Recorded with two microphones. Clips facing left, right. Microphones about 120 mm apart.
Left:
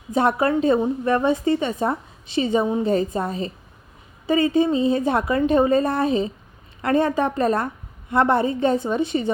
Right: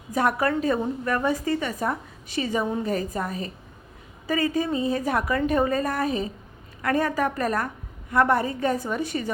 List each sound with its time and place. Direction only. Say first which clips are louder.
0.1 s a woman's voice: left 4 dB; 25° left (ahead or behind)